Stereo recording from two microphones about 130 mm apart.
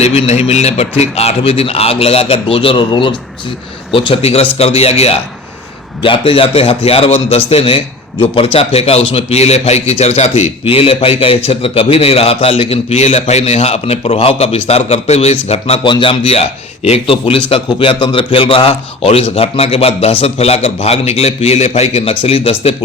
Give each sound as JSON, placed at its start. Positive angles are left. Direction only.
{"t": 0.0, "sound": "a man's voice", "side_deg": 55}